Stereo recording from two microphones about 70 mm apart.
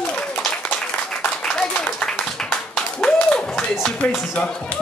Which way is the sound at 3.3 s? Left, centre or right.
Centre.